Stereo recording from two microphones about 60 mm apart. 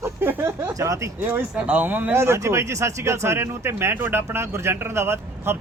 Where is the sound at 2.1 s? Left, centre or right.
Right.